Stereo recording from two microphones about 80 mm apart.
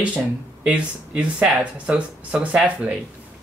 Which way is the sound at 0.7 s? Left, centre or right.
Centre.